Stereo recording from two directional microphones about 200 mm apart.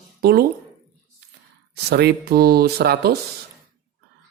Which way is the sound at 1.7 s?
55° right (ahead or behind).